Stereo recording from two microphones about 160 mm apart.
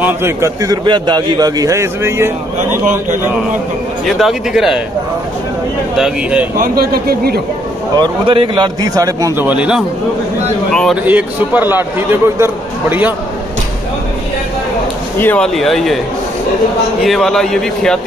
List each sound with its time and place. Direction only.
0.0 s a man's voice: 15° right (ahead or behind)
4.0 s speech: centre (ahead or behind)
5.9 s speech: 5° right (ahead or behind)
6.6 s speech: 70° right (ahead or behind)
8.0 s a man's voice: 30° right (ahead or behind)
9.5 s a man's voice: 5° right (ahead or behind)
11.1 s a man's voice: 10° right (ahead or behind)
15.1 s speech: 10° left (ahead or behind)
17.0 s speech: centre (ahead or behind)